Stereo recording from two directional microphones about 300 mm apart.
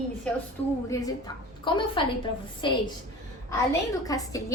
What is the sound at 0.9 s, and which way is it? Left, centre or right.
A woman's voice, centre.